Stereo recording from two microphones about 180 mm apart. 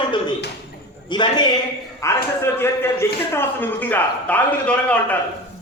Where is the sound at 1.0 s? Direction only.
25° left (ahead or behind); by 5.1 s 5° left (ahead or behind).